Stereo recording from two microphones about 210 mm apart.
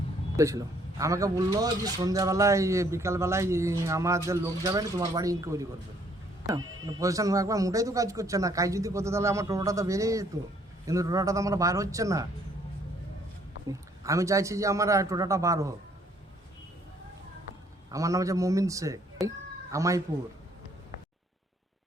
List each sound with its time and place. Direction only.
0.3 s a man's voice: 15° right (ahead or behind)
6.8 s a man's voice: 15° right (ahead or behind)
13.7 s a man's voice: 15° right (ahead or behind)
17.9 s a man's voice: 15° right (ahead or behind)